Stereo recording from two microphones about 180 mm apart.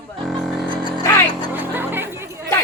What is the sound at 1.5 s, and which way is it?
Music, 10° right (ahead or behind).